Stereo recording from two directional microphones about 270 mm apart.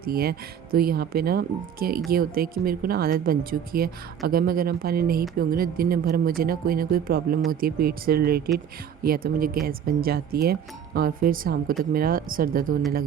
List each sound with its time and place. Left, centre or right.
0.0 s speech: right